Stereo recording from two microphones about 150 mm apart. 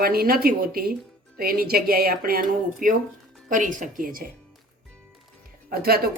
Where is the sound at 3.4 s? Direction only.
60° right (ahead or behind).